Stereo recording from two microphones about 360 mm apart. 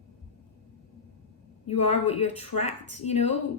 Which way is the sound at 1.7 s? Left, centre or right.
Centre.